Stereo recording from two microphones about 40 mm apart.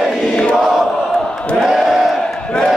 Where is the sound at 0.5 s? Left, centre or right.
Centre.